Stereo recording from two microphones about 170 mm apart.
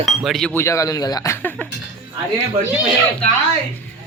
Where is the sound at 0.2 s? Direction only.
Centre (ahead or behind).